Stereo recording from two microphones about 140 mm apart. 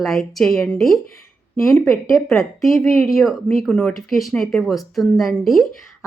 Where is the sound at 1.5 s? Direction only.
20° left (ahead or behind).